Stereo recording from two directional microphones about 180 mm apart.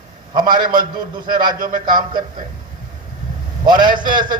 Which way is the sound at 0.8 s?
25° right (ahead or behind).